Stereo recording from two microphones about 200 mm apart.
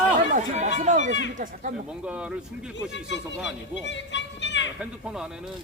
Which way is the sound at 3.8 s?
65° left (ahead or behind).